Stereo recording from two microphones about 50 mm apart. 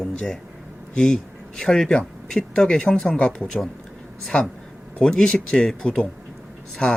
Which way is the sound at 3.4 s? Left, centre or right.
Centre.